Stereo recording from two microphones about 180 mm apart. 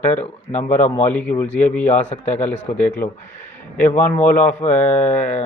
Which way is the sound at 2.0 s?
40° left (ahead or behind).